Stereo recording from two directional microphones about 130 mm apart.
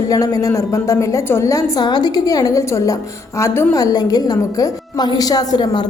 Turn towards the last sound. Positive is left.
turn(degrees=30)  # may be behind; listen again after turning